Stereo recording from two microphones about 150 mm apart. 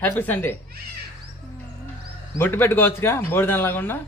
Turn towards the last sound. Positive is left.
turn(degrees=15)  # may be behind; listen again after turning